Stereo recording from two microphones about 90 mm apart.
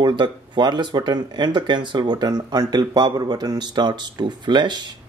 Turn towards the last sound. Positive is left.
turn(degrees=-55)  # may be behind; listen again after turning